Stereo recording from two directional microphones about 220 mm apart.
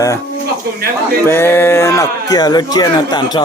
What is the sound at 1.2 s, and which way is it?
Speech, 10° left (ahead or behind).